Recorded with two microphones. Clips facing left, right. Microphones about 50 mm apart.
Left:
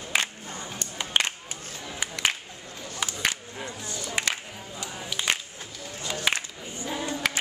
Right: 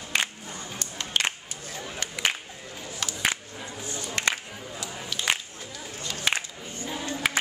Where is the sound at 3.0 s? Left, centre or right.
Centre.